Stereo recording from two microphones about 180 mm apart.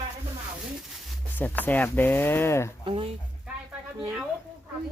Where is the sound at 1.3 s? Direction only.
10° left (ahead or behind).